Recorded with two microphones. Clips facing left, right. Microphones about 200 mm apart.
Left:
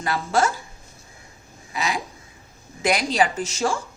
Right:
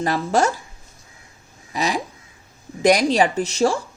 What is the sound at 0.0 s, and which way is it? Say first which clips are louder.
Speech: right 3 dB; 40° right (ahead or behind).